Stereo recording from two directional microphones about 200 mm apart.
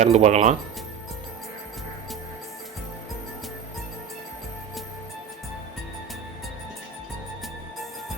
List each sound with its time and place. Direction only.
0.0 s speech: 35° right (ahead or behind)